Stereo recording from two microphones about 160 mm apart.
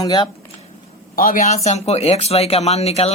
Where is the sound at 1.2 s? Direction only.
60° left (ahead or behind); by 3.1 s 40° left (ahead or behind).